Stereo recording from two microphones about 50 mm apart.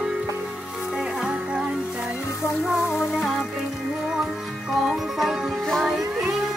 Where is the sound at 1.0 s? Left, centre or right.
Centre.